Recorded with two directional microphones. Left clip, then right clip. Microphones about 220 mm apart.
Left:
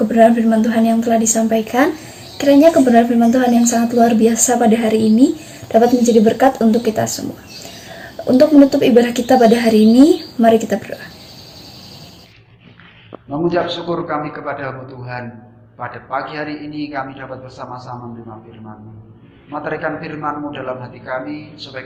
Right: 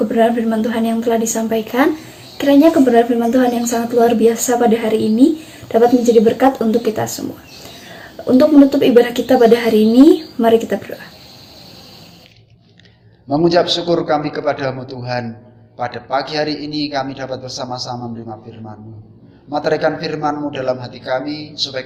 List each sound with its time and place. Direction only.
0.1 s a woman's voice: centre (ahead or behind)
8.3 s a woman's voice: 5° left (ahead or behind)
13.3 s a man's voice: 45° right (ahead or behind)
19.5 s a man's voice: 45° right (ahead or behind)